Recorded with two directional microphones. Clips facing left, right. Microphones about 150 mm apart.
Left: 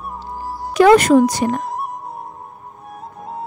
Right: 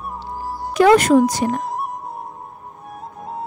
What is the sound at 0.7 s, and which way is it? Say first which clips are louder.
Speech: left 2 dB; 85° left.